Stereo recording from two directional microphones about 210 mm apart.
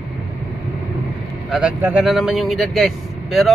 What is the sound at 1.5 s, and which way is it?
Speech, 5° right (ahead or behind).